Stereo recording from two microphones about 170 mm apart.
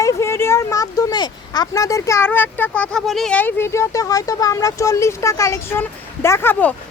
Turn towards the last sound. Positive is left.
turn(degrees=10)  # may be behind; listen again after turning